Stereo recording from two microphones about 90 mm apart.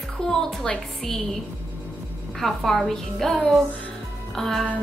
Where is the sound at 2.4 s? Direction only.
5° left (ahead or behind).